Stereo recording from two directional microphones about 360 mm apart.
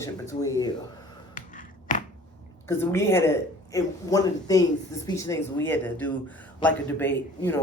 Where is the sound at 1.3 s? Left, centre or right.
Left.